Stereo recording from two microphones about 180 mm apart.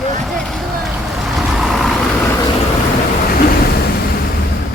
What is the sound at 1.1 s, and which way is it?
Vehicle, centre (ahead or behind).